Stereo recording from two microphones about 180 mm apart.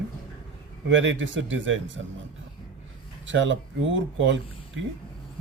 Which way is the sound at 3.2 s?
90° right.